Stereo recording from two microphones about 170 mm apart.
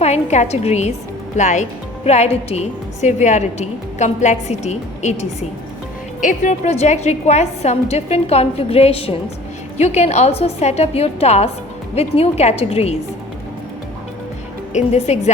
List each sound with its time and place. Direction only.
0.0 s a woman's voice: 40° left (ahead or behind)
14.7 s a woman's voice: 45° left (ahead or behind)